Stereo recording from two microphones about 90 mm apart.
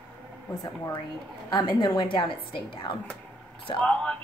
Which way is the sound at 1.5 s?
55° left (ahead or behind).